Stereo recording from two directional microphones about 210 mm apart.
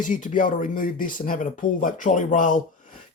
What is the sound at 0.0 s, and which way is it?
Speech, 40° left (ahead or behind).